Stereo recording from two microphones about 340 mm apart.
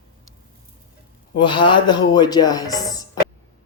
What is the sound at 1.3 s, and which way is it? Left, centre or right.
A man's voice, centre.